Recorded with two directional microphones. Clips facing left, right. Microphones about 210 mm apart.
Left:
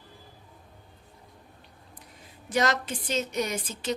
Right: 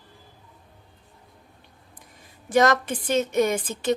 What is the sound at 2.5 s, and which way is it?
A woman's voice, 50° right (ahead or behind).